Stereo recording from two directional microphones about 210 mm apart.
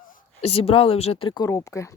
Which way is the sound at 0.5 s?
25° left (ahead or behind).